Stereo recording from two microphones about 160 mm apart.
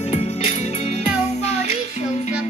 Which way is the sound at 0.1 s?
45° left (ahead or behind).